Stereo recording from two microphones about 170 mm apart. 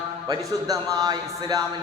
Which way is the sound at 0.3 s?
20° right (ahead or behind).